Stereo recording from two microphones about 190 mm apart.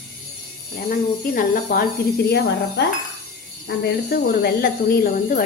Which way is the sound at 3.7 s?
55° left (ahead or behind).